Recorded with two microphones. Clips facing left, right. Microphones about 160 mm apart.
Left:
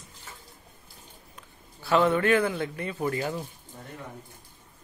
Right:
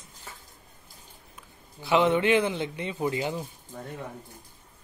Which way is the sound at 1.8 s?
15° right (ahead or behind).